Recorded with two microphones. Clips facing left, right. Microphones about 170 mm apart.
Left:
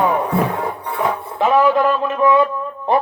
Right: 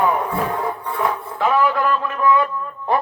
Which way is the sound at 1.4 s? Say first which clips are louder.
Left 4 dB; 20° left (ahead or behind).